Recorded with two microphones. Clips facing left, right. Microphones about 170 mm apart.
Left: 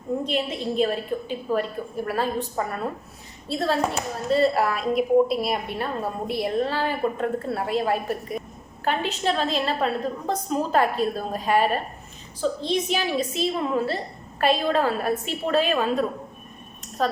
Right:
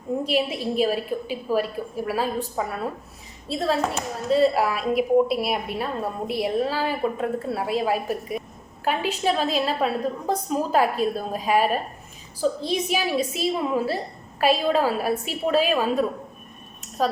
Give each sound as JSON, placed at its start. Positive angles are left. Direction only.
{"t": 0.3, "sound": "speech", "side_deg": -5}